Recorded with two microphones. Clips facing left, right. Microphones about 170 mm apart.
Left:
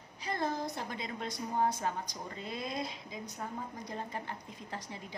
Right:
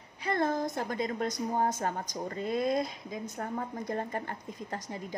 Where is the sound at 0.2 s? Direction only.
55° right (ahead or behind).